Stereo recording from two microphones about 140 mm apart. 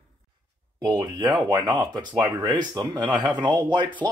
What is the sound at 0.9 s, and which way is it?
Speech, 30° right (ahead or behind).